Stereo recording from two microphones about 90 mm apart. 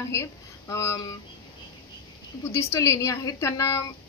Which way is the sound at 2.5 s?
35° left (ahead or behind).